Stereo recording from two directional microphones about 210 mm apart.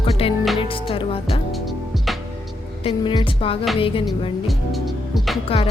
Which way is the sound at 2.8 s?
20° left (ahead or behind).